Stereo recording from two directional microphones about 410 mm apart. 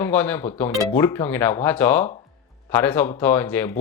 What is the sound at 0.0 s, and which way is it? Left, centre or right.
Speech, centre.